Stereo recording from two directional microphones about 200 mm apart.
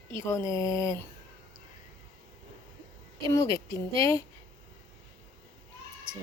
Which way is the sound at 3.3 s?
15° left (ahead or behind).